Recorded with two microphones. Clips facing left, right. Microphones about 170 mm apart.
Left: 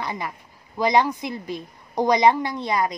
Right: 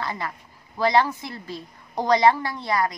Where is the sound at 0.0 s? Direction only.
15° left (ahead or behind).